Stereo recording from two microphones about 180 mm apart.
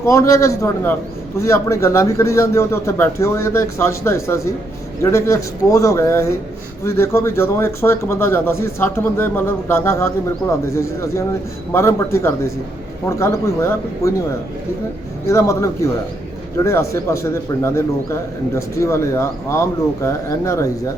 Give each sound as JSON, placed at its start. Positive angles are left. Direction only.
{"t": 0.0, "sound": "speech", "side_deg": 15}
{"t": 15.3, "sound": "speech", "side_deg": 15}